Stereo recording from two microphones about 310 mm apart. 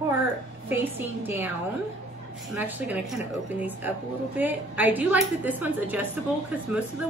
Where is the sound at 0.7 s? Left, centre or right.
Centre.